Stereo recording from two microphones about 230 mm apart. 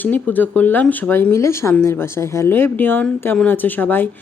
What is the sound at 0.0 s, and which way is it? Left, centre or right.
Speech, centre.